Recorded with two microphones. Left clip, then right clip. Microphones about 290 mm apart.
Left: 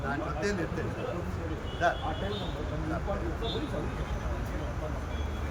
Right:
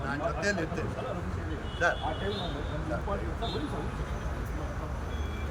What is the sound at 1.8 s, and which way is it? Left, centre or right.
Speech, centre.